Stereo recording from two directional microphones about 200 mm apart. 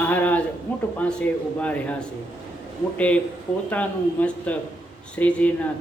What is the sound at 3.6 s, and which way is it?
A man's voice, 5° left (ahead or behind).